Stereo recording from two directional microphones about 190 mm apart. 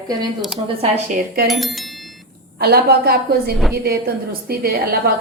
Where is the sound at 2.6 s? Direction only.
55° right (ahead or behind).